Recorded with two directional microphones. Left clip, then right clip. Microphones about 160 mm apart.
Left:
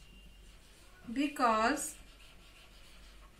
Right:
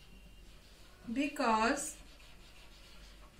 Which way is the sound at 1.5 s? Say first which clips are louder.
Even; 25° right (ahead or behind).